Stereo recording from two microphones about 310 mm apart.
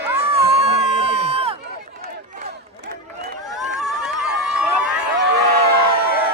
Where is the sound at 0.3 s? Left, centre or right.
Centre.